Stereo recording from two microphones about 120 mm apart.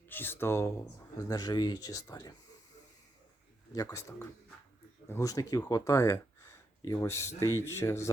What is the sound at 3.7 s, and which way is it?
Speech, 30° left (ahead or behind).